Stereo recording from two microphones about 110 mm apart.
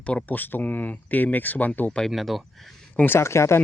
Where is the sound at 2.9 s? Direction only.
20° left (ahead or behind).